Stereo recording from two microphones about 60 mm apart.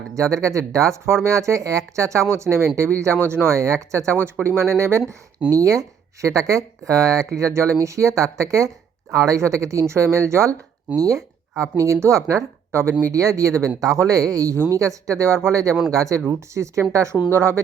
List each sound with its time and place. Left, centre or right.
0.4 s speech: right
1.0 s speech: right
3.5 s speech: right
5.5 s speech: right
10.9 s speech: right
13.1 s speech: right
14.0 s speech: right
15.9 s speech: right
16.2 s speech: right